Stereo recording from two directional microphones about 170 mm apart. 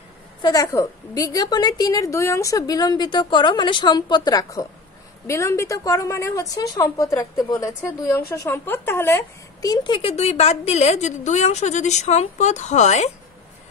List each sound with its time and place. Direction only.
0.4 s a woman's voice: 20° left (ahead or behind); by 13.1 s 40° left (ahead or behind)